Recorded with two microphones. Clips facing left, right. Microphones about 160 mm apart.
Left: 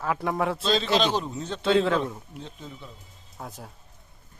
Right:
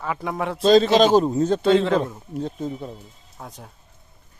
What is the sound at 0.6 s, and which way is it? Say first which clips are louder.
A man's voice: right 12 dB; 45° right (ahead or behind).